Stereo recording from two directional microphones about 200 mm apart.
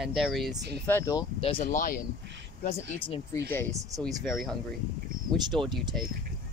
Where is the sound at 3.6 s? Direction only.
15° right (ahead or behind).